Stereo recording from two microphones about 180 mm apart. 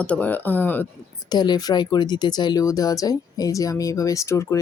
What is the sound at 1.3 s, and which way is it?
Speech, 25° left (ahead or behind).